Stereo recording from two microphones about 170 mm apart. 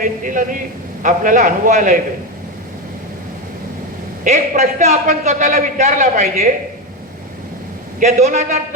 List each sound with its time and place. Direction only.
0.0 s a man's voice: 50° right (ahead or behind)
4.2 s a man's voice: 45° right (ahead or behind)
7.9 s a man's voice: 45° right (ahead or behind)